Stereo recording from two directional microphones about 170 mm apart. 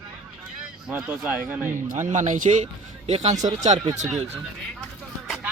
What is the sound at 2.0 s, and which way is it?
Speech, 45° right (ahead or behind).